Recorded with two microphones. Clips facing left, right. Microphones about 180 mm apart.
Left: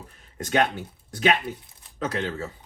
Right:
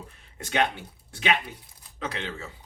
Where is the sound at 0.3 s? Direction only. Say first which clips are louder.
Left 3 dB; 45° left (ahead or behind).